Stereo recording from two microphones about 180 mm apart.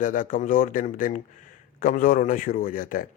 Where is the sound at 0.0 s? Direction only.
45° left (ahead or behind).